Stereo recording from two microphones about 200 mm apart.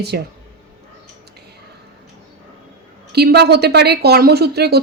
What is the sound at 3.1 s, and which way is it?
A woman's voice, 55° right (ahead or behind).